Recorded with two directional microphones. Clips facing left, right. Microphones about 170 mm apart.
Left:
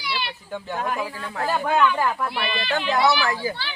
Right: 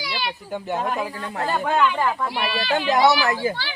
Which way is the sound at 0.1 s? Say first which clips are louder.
Even; 20° right (ahead or behind).